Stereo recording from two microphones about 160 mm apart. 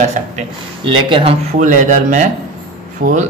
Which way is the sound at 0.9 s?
30° right (ahead or behind).